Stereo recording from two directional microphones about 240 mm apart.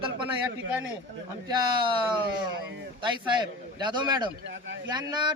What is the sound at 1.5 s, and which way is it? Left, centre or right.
Speech, centre.